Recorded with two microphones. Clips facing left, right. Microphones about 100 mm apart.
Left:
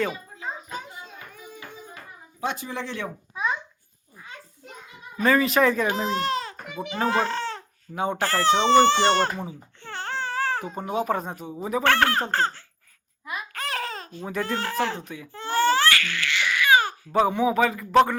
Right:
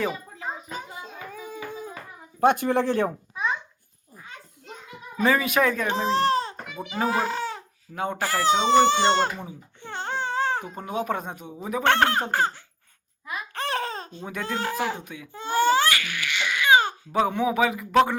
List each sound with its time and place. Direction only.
2.4 s speech: 55° right (ahead or behind)
5.2 s speech: 5° right (ahead or behind)
6.1 s speech: 35° right (ahead or behind)
6.9 s speech: 10° right (ahead or behind)
7.9 s speech: 10° left (ahead or behind)
8.2 s speech: 10° right (ahead or behind)
9.8 s baby cry: 20° right (ahead or behind)
10.8 s speech: 5° left (ahead or behind)
11.8 s speech: 20° right (ahead or behind)
13.5 s laughter: 30° right (ahead or behind)
14.4 s speech: 15° right (ahead or behind)
15.3 s babbling: 15° right (ahead or behind)
17.1 s speech: centre (ahead or behind)
17.5 s speech: 10° right (ahead or behind)